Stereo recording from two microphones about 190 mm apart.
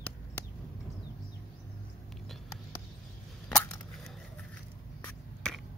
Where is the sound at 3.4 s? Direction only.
5° left (ahead or behind).